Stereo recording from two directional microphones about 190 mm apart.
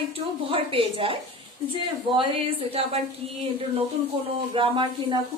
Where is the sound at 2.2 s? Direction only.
30° right (ahead or behind).